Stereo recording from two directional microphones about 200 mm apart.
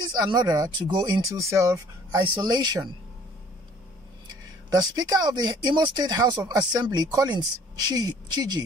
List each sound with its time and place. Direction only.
0.1 s speech: 20° right (ahead or behind)
4.7 s speech: 20° right (ahead or behind)